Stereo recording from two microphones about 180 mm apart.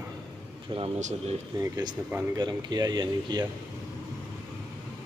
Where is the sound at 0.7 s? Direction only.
35° right (ahead or behind).